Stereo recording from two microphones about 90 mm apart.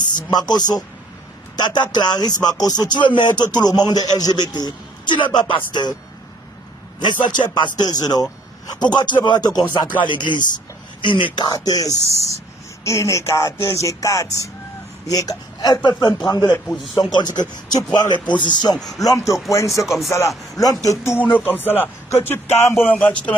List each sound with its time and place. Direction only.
0.3 s speech: 50° left (ahead or behind)
7.0 s speech: 55° left (ahead or behind)
9.8 s speech: 60° left (ahead or behind)
11.3 s speech: 50° left (ahead or behind)
12.8 s music: 35° left (ahead or behind)
15.0 s speech: 40° left (ahead or behind)
16.5 s a man's voice: 5° left (ahead or behind)
16.9 s speech: 55° left (ahead or behind)
18.9 s music: 40° left (ahead or behind)
19.8 s a man's voice: centre (ahead or behind)
20.6 s music: 40° left (ahead or behind)
21.3 s a sound: 20° left (ahead or behind)